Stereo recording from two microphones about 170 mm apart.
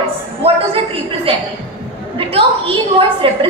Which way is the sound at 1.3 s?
30° right (ahead or behind).